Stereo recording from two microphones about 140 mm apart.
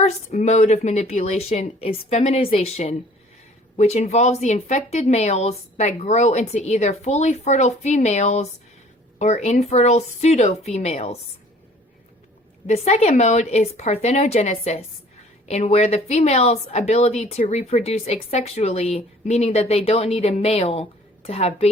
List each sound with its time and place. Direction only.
0.0 s speech: 55° left (ahead or behind)
12.6 s speech: 50° left (ahead or behind)